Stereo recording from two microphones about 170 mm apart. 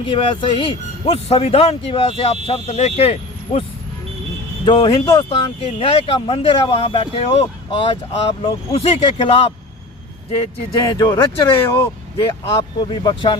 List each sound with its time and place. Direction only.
0.0 s speech: 30° left (ahead or behind)
4.6 s speech: 30° left (ahead or behind)
10.8 s speech: 20° left (ahead or behind)